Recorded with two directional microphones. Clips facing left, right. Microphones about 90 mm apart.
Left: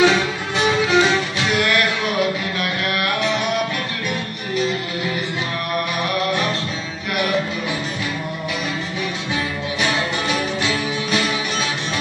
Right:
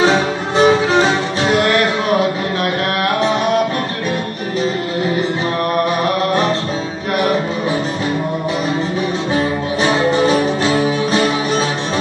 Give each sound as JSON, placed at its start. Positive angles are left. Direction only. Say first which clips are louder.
{"t": 0.0, "sound": "music", "louder": "right 3 dB", "side_deg": -35}
{"t": 6.0, "sound": "music", "louder": "right 5 dB", "side_deg": -35}
{"t": 9.3, "sound": "music", "louder": "right 8 dB", "side_deg": -35}